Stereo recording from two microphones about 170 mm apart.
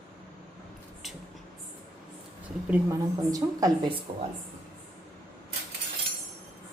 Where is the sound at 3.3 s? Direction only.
20° right (ahead or behind).